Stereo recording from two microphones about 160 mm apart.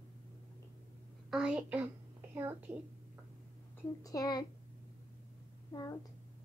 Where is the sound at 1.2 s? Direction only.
5° right (ahead or behind).